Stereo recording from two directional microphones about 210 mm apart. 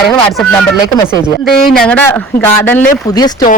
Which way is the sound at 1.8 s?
10° left (ahead or behind).